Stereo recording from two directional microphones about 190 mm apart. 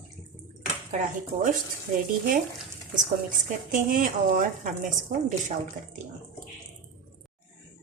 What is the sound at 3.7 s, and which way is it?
Speech, 45° right (ahead or behind).